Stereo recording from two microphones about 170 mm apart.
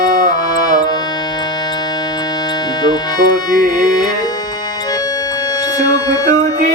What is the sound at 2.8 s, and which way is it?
Music, 25° left (ahead or behind).